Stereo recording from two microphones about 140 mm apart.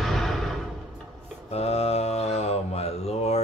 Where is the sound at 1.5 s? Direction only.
45° left (ahead or behind).